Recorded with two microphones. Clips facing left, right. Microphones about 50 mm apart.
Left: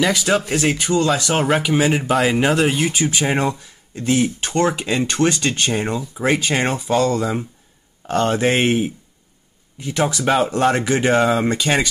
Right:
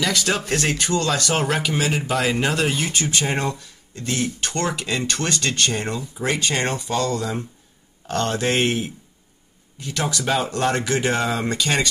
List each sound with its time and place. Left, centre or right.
0.1 s speech: centre